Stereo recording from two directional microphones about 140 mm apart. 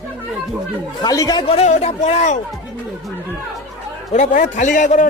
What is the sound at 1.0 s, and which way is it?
Speech, 25° left (ahead or behind).